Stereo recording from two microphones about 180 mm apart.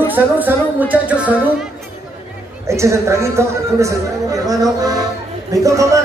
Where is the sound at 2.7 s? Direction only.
15° right (ahead or behind).